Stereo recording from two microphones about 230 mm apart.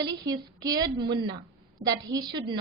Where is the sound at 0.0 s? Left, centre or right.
Centre.